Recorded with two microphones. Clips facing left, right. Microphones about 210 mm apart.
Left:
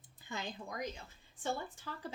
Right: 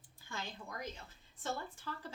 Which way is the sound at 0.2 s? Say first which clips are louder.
Left 3 dB; 20° left (ahead or behind).